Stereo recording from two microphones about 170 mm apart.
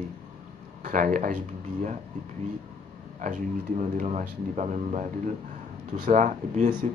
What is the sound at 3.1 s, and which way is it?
Speech, 50° right (ahead or behind).